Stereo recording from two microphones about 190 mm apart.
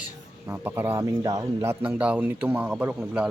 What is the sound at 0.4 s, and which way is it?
A man's voice, 10° right (ahead or behind).